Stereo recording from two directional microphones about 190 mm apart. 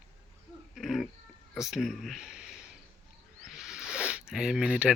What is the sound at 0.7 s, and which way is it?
Speech, centre (ahead or behind).